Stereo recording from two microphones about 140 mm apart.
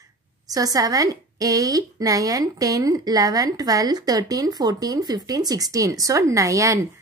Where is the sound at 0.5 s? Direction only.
25° right (ahead or behind).